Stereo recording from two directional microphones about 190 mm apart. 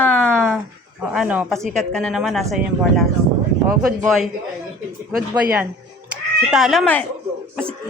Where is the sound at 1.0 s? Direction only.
5° right (ahead or behind).